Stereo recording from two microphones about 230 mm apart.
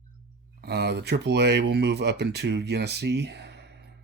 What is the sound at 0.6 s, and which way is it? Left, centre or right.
Speech, right.